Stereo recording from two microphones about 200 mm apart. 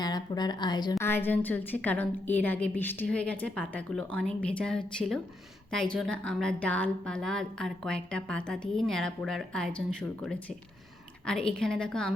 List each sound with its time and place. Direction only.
0.0 s a woman's voice: 20° left (ahead or behind); by 12.1 s 5° left (ahead or behind)